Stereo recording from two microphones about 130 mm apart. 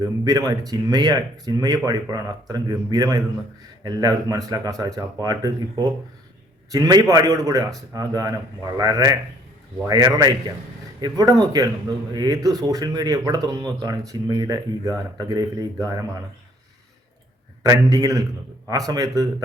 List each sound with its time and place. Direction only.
0.0 s a man's voice: 30° right (ahead or behind)
17.6 s speech: 25° right (ahead or behind)